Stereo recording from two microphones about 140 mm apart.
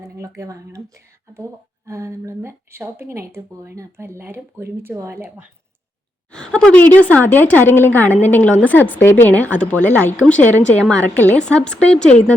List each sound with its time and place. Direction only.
0.0 s speech: 20° right (ahead or behind)
6.3 s speech: 5° left (ahead or behind)